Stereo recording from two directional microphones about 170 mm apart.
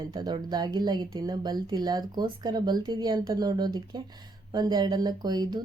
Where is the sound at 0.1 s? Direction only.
25° right (ahead or behind).